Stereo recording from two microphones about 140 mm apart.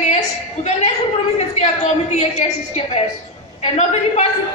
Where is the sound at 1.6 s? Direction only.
50° left (ahead or behind).